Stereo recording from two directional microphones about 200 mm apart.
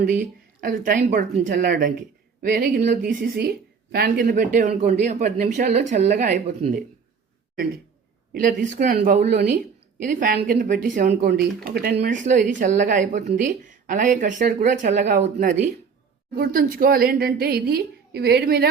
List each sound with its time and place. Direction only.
0.0 s a woman's voice: 45° right (ahead or behind)
8.3 s a woman's voice: 45° right (ahead or behind)
11.1 s a woman's voice: 55° right (ahead or behind)